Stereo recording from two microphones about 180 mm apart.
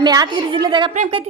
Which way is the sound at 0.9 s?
40° right (ahead or behind).